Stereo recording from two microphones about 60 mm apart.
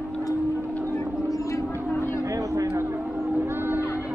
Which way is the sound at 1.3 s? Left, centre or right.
Left.